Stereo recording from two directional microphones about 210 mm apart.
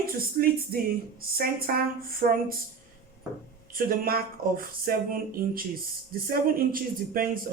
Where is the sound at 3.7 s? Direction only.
45° right (ahead or behind).